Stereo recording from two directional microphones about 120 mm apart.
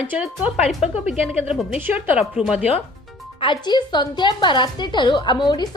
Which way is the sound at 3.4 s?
40° left (ahead or behind).